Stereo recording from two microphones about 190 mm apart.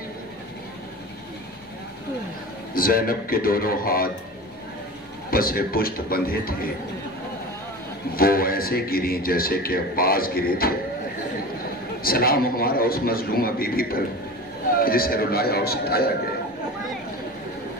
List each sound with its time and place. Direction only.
2.7 s speech: 50° left (ahead or behind)
5.3 s speech: 50° left (ahead or behind)
8.1 s speech: 50° left (ahead or behind)
12.0 s speech: 50° left (ahead or behind)